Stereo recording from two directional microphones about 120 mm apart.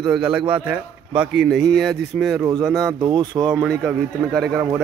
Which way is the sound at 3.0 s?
45° right (ahead or behind).